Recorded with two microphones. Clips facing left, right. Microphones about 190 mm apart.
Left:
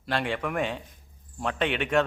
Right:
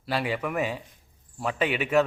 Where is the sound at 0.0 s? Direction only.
5° right (ahead or behind).